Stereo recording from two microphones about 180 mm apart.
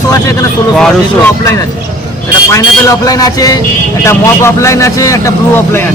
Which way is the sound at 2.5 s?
20° left (ahead or behind).